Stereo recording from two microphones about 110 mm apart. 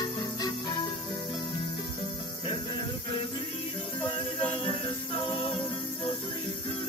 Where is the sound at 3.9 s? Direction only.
50° left (ahead or behind).